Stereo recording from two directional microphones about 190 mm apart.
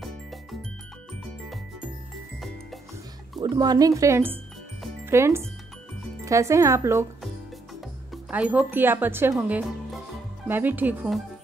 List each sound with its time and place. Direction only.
3.3 s speech: 20° right (ahead or behind)
8.1 s speech: 5° right (ahead or behind)